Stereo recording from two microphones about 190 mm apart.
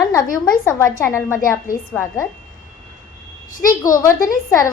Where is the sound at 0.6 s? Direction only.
10° left (ahead or behind).